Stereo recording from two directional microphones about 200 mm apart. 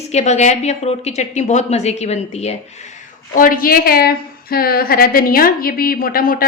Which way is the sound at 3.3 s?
45° left (ahead or behind).